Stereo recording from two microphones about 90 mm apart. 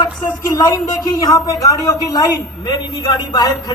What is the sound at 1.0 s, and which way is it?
A woman's voice, 40° left (ahead or behind).